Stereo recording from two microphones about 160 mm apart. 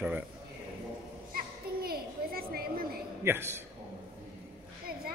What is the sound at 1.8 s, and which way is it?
Children playing, 70° right (ahead or behind).